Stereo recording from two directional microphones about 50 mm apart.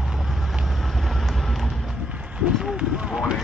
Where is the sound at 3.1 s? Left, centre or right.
Centre.